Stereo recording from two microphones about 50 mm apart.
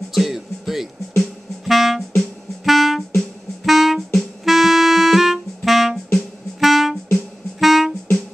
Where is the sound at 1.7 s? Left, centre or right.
Centre.